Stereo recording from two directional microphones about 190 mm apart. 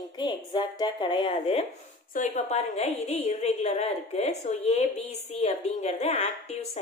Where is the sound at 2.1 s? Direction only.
40° left (ahead or behind).